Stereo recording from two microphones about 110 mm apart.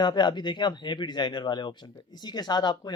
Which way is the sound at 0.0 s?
45° left (ahead or behind).